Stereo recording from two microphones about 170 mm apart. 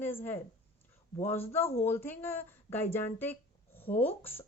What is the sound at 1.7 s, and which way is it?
A woman's voice, 15° left (ahead or behind).